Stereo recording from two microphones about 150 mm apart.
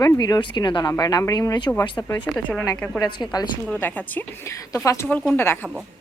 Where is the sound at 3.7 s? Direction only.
10° left (ahead or behind).